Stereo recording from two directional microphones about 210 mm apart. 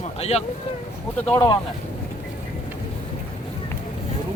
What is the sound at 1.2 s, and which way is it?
Speech, 10° left (ahead or behind).